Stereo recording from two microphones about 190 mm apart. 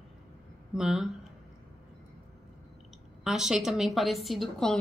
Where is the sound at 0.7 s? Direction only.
5° right (ahead or behind).